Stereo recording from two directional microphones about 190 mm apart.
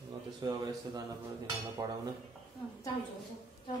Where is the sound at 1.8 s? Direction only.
15° right (ahead or behind).